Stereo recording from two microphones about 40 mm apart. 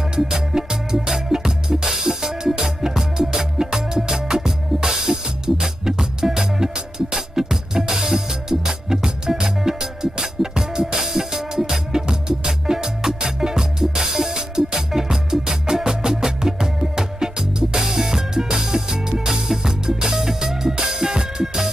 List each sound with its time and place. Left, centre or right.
0.1 s music: centre